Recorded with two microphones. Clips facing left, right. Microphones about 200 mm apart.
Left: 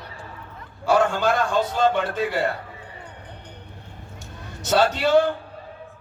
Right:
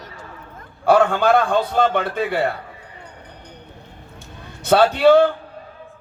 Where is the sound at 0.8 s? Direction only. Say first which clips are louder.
Right 4 dB; 60° right (ahead or behind).